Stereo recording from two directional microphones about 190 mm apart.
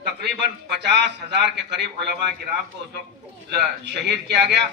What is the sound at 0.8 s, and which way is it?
A man's voice, 65° right (ahead or behind).